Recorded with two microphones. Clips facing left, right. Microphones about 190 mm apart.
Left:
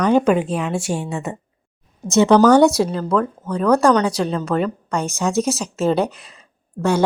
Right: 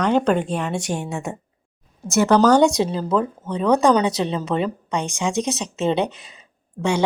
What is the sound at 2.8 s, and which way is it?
Speech, 30° right (ahead or behind).